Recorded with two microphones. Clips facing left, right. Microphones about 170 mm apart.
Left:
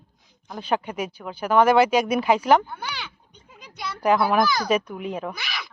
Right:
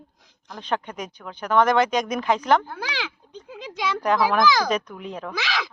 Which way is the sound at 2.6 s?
90° right.